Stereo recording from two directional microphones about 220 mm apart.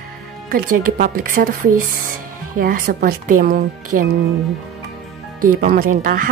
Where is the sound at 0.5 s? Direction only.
40° right (ahead or behind).